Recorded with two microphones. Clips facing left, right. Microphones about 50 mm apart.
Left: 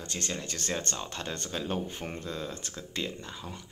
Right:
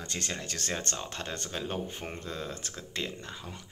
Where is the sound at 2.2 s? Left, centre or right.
Right.